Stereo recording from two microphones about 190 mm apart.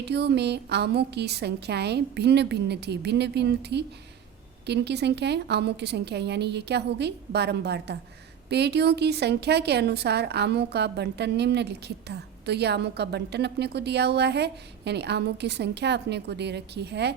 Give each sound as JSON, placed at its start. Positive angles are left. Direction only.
{"t": 0.0, "sound": "a woman's voice", "side_deg": -60}